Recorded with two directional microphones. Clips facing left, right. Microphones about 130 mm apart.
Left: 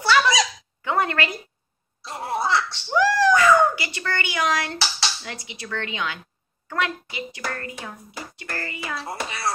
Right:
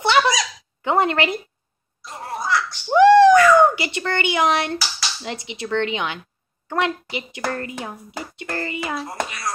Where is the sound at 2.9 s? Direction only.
25° right (ahead or behind).